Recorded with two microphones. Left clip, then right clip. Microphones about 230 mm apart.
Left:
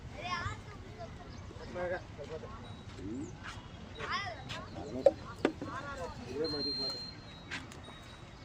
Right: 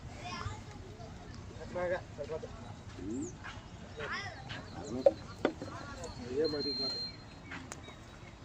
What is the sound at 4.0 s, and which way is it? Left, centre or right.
Vehicle, left.